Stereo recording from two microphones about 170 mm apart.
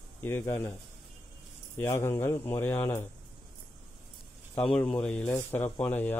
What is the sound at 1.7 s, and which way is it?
Speech, 15° left (ahead or behind).